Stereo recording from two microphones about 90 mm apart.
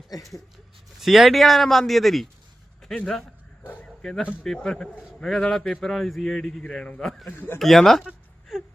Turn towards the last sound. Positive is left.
turn(degrees=5)  # may be behind; listen again after turning